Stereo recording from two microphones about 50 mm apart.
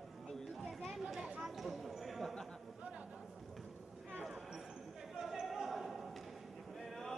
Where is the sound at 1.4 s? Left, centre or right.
Centre.